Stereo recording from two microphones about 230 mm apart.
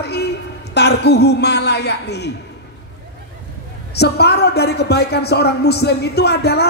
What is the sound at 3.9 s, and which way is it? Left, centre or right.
A man's voice, left.